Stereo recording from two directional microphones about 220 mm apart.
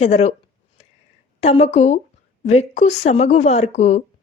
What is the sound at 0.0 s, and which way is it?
Speech, 30° left (ahead or behind).